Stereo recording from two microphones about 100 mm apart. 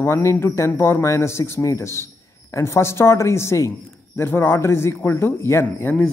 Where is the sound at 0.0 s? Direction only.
25° left (ahead or behind).